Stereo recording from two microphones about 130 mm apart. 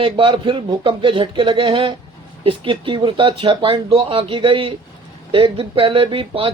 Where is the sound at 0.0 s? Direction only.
40° right (ahead or behind).